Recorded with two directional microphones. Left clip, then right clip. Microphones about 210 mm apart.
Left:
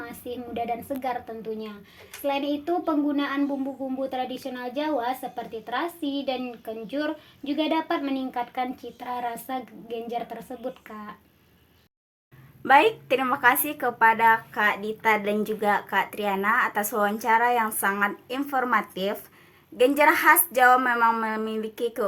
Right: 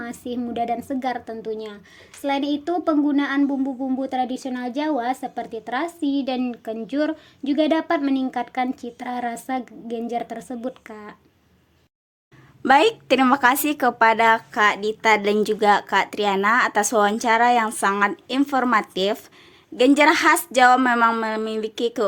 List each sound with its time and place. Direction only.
0.0 s speech: 45° right (ahead or behind)
12.6 s speech: 50° right (ahead or behind)